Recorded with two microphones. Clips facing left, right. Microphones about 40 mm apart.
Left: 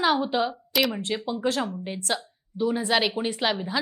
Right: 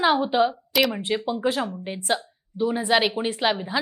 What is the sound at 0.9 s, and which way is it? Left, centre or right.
Speech, centre.